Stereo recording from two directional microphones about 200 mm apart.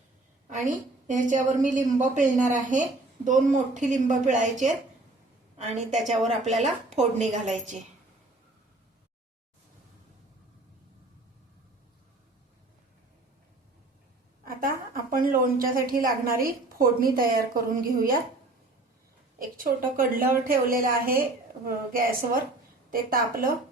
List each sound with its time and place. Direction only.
0.7 s a woman's voice: 40° right (ahead or behind)
14.4 s a woman's voice: 45° right (ahead or behind)
19.4 s a woman's voice: 45° right (ahead or behind)